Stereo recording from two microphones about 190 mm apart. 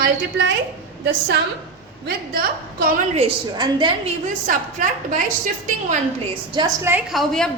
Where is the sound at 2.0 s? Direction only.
50° right (ahead or behind).